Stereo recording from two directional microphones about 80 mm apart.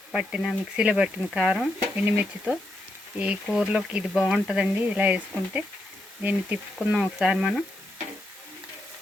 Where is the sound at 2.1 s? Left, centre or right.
Right.